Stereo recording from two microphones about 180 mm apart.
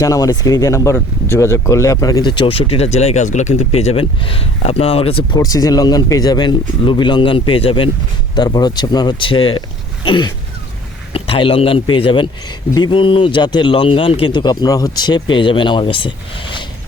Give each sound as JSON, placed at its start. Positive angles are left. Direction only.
{"t": 0.0, "sound": "a man's voice", "side_deg": 20}
{"t": 5.4, "sound": "a man's voice", "side_deg": 20}